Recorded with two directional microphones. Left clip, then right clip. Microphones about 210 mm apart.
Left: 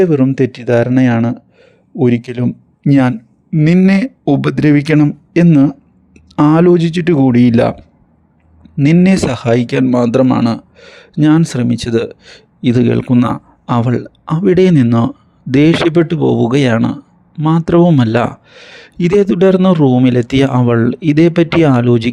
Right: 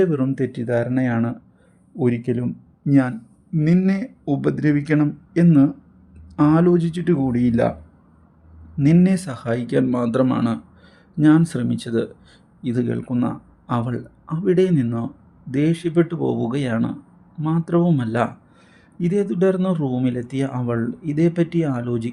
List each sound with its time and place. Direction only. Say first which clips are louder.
0.0 s speech: left 9 dB; 30° left (ahead or behind)
9.0 s speech: left 9 dB; 35° left (ahead or behind)